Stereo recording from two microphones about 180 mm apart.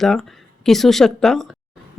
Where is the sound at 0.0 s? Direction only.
Centre (ahead or behind).